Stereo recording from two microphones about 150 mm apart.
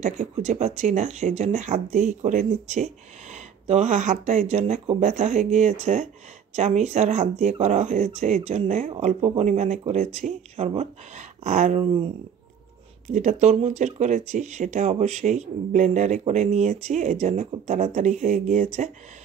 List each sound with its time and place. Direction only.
0.0 s speech: 45° right (ahead or behind)
13.0 s speech: 50° right (ahead or behind)